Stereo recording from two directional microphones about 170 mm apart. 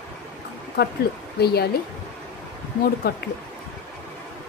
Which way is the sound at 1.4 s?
70° left (ahead or behind).